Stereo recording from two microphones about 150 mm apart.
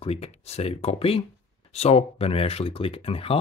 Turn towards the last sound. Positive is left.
turn(degrees=40)  # may be behind; listen again after turning